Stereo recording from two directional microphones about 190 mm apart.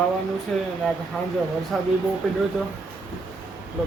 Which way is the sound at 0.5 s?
5° left (ahead or behind).